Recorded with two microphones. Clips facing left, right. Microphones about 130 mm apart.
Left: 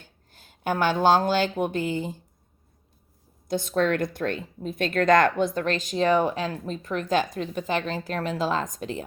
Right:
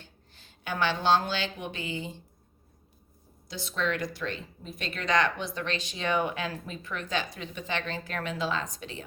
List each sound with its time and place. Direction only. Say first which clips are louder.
0.0 s speech: even; 45° left (ahead or behind)
3.5 s speech: left 8 dB; 50° left (ahead or behind)